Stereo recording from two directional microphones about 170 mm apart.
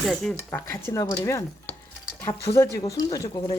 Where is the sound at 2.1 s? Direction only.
15° left (ahead or behind).